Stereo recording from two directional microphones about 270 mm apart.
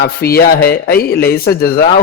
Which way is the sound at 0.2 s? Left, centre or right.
Left.